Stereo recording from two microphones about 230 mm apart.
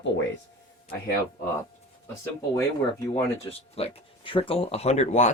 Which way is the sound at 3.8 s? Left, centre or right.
Left.